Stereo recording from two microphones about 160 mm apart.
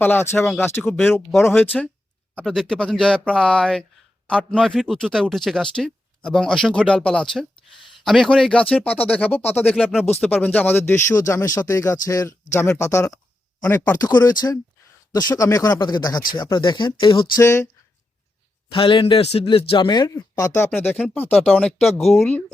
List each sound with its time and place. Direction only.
0.0 s speech: 15° left (ahead or behind); by 17.4 s 30° left (ahead or behind)
17.4 s speech: 20° left (ahead or behind)
18.7 s speech: 30° left (ahead or behind); by 22.1 s centre (ahead or behind)